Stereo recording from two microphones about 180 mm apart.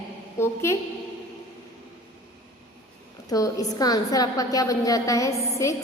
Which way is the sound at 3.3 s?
20° left (ahead or behind).